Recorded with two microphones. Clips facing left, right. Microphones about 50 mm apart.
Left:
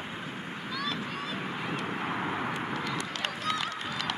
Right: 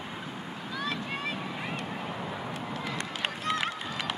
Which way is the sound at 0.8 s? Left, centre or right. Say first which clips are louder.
Right 2 dB; right.